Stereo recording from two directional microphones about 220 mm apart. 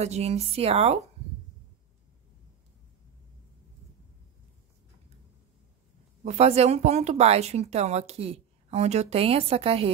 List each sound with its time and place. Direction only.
0.0 s speech: 30° right (ahead or behind)
6.2 s speech: 30° right (ahead or behind)